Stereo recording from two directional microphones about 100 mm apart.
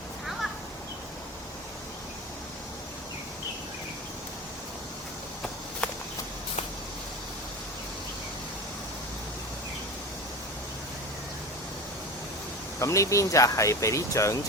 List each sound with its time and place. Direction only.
5.8 s walk: 15° left (ahead or behind)
12.8 s speech: 30° left (ahead or behind)